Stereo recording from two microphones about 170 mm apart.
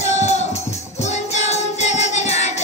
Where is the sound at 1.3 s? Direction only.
40° left (ahead or behind).